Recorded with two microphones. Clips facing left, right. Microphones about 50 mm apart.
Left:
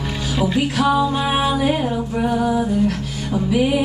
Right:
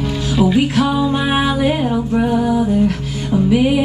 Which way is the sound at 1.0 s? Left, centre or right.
Centre.